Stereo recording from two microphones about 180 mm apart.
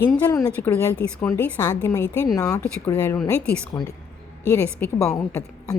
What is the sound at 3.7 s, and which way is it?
A woman's voice, 20° left (ahead or behind).